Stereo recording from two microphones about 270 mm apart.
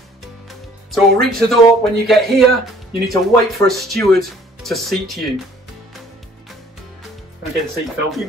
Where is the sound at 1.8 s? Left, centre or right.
Centre.